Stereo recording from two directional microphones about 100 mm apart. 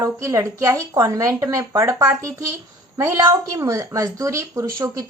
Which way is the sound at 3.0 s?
30° right (ahead or behind).